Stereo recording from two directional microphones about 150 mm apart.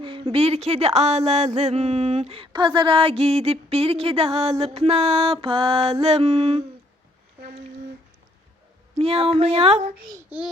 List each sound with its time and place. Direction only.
0.0 s speech: 35° right (ahead or behind)
1.5 s a sound: 45° right (ahead or behind)
9.0 s speech: 40° right (ahead or behind)
10.2 s a child's voice: 10° right (ahead or behind)